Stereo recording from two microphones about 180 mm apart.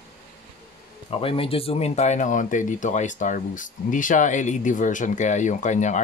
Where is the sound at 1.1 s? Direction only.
30° left (ahead or behind).